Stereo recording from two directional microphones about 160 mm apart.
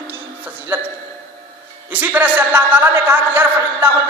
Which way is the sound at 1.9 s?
10° right (ahead or behind).